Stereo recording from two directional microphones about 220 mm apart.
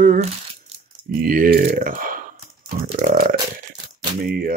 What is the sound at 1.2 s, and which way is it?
Speech, 40° right (ahead or behind).